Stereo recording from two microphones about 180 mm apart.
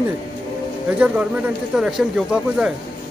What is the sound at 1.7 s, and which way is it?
Speech, 5° right (ahead or behind).